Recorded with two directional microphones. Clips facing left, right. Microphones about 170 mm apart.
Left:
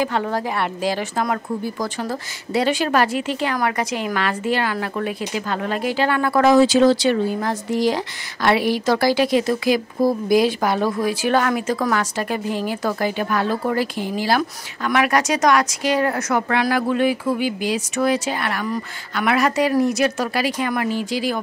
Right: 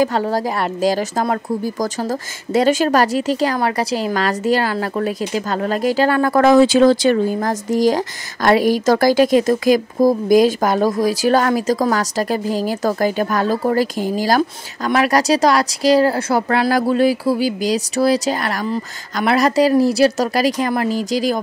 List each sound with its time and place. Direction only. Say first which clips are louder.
0.0 s speech: right 4 dB; 35° right (ahead or behind)